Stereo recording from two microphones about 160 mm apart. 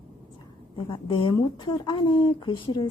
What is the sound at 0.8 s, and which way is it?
Speech, 30° left (ahead or behind).